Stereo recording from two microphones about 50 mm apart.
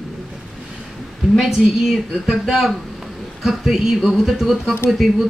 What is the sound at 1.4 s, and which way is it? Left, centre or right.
A woman's voice, centre.